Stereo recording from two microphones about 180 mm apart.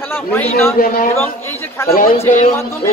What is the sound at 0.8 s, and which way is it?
Speech, 55° left (ahead or behind).